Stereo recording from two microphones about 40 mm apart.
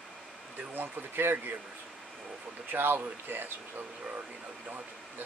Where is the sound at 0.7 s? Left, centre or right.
Right.